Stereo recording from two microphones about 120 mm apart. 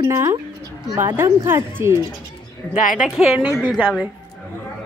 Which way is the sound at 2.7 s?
90° left.